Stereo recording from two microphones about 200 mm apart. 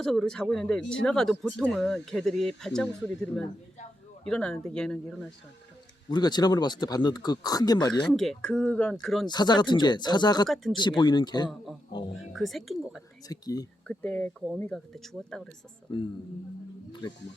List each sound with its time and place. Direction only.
0.0 s speech: centre (ahead or behind)
6.1 s speech: 20° left (ahead or behind)
8.0 s speech: centre (ahead or behind)
9.2 s speech: 20° left (ahead or behind)
10.5 s speech: centre (ahead or behind)
10.8 s speech: 20° left (ahead or behind)
12.1 s speech: centre (ahead or behind)
13.2 s speech: 20° left (ahead or behind)
13.8 s speech: 5° left (ahead or behind)
15.9 s speech: 25° left (ahead or behind)